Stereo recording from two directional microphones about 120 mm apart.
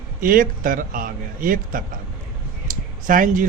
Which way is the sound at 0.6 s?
90° right.